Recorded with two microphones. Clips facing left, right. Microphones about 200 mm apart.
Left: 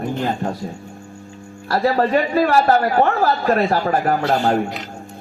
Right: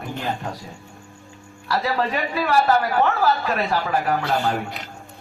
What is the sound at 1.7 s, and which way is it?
A man's voice, 45° left (ahead or behind).